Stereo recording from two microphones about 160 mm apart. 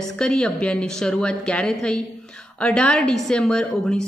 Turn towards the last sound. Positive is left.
turn(degrees=5)  # may be behind; listen again after turning